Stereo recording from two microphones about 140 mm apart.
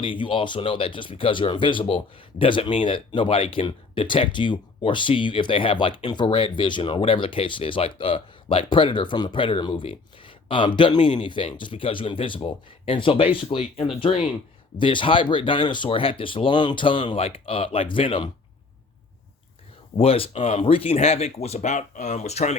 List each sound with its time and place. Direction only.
0.0 s speech: 40° left (ahead or behind)
20.0 s speech: 45° left (ahead or behind)